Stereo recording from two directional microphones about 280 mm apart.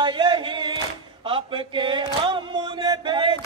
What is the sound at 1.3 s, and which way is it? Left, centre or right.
Chant, centre.